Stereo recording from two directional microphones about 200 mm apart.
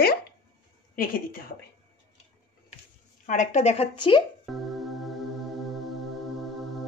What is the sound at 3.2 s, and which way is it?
Speech, 35° left (ahead or behind).